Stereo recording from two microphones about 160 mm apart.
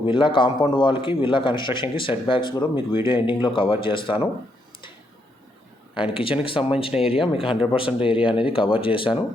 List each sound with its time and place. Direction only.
0.0 s a man's voice: 30° left (ahead or behind)
6.0 s a man's voice: 35° left (ahead or behind)